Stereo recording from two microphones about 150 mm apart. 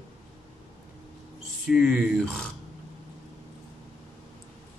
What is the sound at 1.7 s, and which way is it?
Speech, centre (ahead or behind).